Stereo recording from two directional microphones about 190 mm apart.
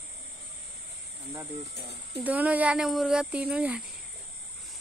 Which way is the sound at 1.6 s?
60° left (ahead or behind).